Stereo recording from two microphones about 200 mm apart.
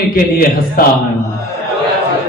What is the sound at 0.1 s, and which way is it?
Speech, 50° left (ahead or behind).